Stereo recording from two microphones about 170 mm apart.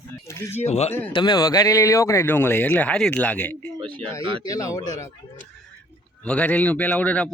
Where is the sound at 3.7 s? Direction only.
30° right (ahead or behind).